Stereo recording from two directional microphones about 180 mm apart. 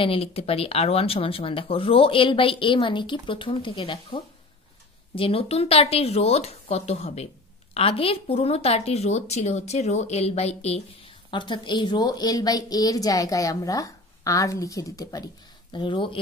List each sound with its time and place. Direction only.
0.0 s speech: 30° left (ahead or behind)